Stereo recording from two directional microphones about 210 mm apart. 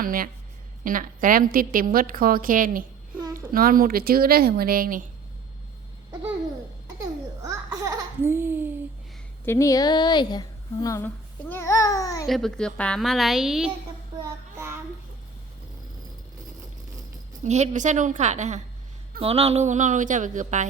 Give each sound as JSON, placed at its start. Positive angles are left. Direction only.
{"t": 0.0, "sound": "a woman's voice", "side_deg": -40}
{"t": 7.0, "sound": "laughter", "side_deg": -15}
{"t": 9.5, "sound": "a woman's voice", "side_deg": 15}
{"t": 12.3, "sound": "a woman's voice", "side_deg": 0}
{"t": 17.4, "sound": "a woman's voice", "side_deg": -35}